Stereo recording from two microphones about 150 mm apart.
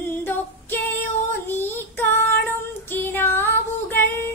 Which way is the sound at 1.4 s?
15° left (ahead or behind).